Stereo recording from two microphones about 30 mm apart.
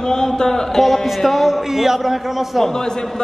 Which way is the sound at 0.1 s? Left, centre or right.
Left.